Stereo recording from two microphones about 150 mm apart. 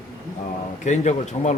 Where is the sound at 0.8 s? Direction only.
50° left (ahead or behind).